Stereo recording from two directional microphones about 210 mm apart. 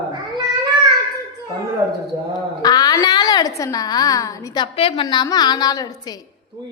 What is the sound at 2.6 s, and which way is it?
A woman's voice, 20° left (ahead or behind).